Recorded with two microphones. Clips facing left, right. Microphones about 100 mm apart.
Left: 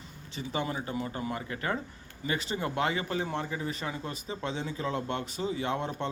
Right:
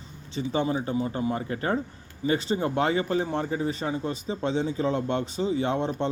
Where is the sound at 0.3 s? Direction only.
30° right (ahead or behind).